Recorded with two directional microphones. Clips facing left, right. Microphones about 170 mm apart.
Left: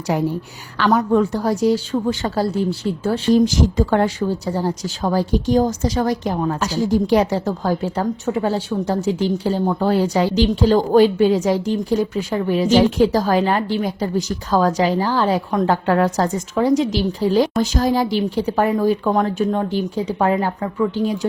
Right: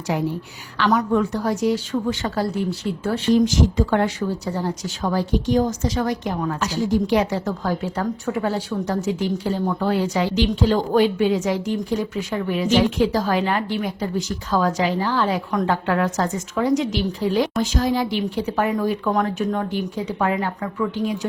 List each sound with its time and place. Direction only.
0.1 s a woman's voice: 45° left (ahead or behind)
0.9 s speech: 30° left (ahead or behind)